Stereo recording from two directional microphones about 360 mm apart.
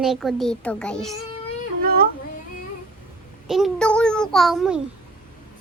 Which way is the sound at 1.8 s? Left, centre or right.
Right.